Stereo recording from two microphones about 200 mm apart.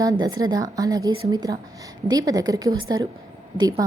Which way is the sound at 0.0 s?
20° right (ahead or behind).